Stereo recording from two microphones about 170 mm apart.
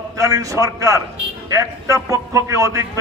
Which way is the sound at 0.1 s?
20° right (ahead or behind).